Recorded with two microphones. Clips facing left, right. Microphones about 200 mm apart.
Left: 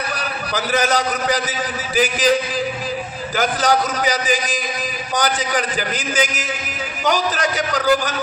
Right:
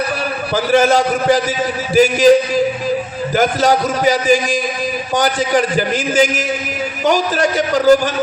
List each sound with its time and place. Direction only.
0.5 s a man's voice: 45° right (ahead or behind)
3.3 s a man's voice: 45° right (ahead or behind)